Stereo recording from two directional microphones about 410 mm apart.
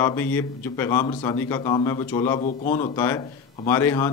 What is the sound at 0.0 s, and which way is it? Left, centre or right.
A man's voice, centre.